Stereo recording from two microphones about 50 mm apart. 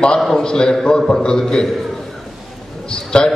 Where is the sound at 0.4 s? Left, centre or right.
Centre.